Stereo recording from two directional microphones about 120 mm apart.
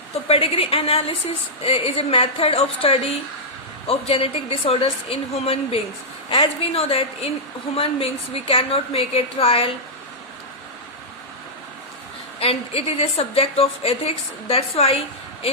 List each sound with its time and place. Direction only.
0.3 s a woman's voice: 55° left (ahead or behind)
12.4 s a woman's voice: 55° left (ahead or behind)